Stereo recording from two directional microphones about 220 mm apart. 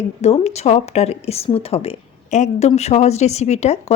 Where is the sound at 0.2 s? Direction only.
30° left (ahead or behind).